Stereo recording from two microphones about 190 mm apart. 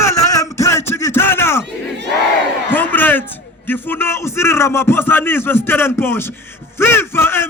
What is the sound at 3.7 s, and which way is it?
A man's voice, 10° left (ahead or behind).